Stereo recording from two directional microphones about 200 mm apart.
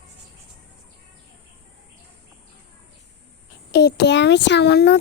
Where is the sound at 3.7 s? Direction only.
55° left (ahead or behind).